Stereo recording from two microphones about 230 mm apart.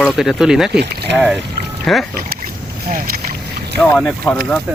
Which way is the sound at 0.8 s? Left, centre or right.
Right.